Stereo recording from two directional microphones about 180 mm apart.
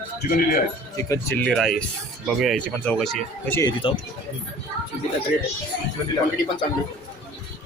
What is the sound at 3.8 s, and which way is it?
Speech, 30° left (ahead or behind).